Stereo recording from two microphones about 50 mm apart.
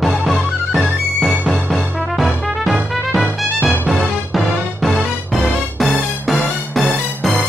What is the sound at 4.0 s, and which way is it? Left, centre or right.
Music, centre.